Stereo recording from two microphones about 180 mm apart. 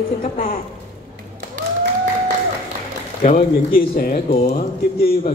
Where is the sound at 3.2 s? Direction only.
50° left (ahead or behind).